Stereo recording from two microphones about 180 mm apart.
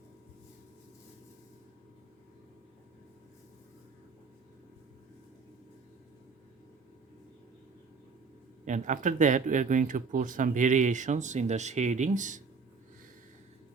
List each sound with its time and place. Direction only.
8.6 s speech: 45° right (ahead or behind)